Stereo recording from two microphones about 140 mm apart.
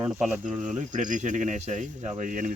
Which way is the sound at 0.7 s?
65° right (ahead or behind).